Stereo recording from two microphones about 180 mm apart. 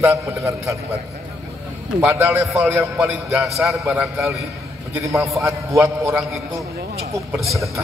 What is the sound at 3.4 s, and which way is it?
A man's voice, centre (ahead or behind).